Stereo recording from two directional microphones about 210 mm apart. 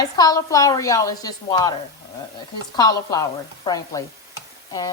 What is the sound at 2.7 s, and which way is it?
A woman's voice, 15° left (ahead or behind).